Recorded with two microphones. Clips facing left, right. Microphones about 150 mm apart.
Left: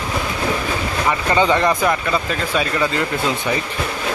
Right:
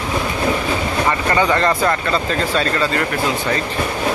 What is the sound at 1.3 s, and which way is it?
Speech, 15° left (ahead or behind).